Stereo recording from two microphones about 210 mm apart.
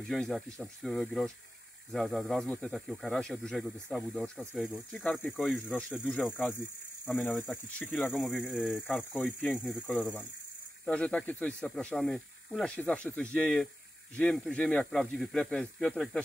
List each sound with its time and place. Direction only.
0.0 s speech: centre (ahead or behind)